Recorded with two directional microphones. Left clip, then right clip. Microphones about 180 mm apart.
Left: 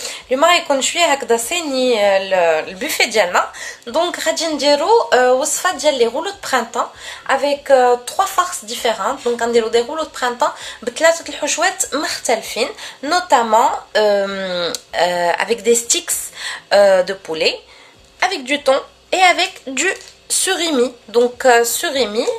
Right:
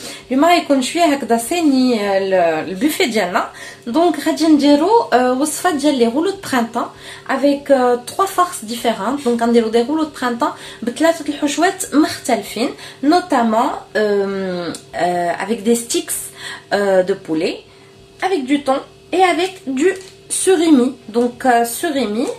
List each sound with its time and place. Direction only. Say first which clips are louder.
0.3 s speech: even; 40° left (ahead or behind)
18.2 s a woman's voice: left 1 dB; 60° left (ahead or behind)
20.4 s a woman's voice: right 4 dB; 45° left (ahead or behind)